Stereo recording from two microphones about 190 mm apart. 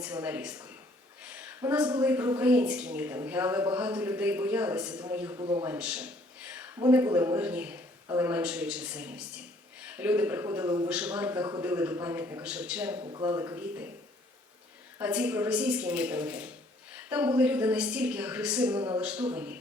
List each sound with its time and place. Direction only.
0.0 s a woman's voice: 10° right (ahead or behind)
1.2 s a sound: 5° right (ahead or behind)
1.9 s a woman's voice: 10° right (ahead or behind)
5.4 s a man's voice: 25° right (ahead or behind)
5.6 s a sound: 5° right (ahead or behind)
6.7 s a woman's voice: 15° right (ahead or behind)
13.0 s a woman's voice: 20° right (ahead or behind)
14.9 s a woman's voice: 10° right (ahead or behind)